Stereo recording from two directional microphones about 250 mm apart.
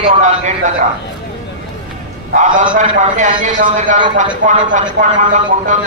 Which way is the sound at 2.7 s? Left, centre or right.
Right.